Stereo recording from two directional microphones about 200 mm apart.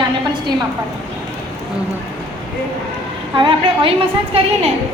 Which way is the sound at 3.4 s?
25° right (ahead or behind).